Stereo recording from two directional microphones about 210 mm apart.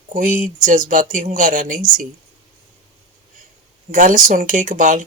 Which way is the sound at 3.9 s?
40° right (ahead or behind).